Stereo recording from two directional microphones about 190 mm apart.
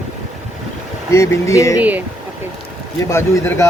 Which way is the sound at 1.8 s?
10° right (ahead or behind).